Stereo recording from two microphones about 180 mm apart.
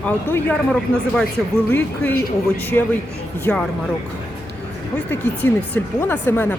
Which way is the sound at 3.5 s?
10° left (ahead or behind).